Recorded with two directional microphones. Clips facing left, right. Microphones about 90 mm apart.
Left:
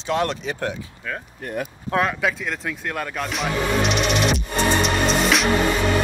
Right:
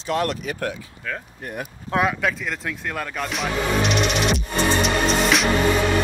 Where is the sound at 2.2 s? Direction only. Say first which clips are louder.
Left 1 dB; centre (ahead or behind).